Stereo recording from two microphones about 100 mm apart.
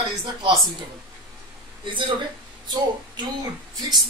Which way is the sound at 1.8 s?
55° right (ahead or behind).